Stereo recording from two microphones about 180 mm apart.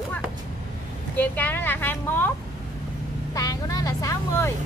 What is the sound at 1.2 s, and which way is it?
A woman's voice, 10° left (ahead or behind).